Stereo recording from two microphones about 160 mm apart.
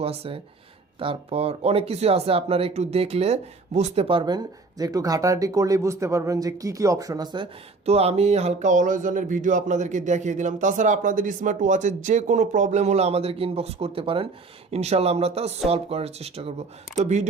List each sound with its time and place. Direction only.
0.0 s speech: 40° right (ahead or behind)
7.9 s speech: 40° right (ahead or behind)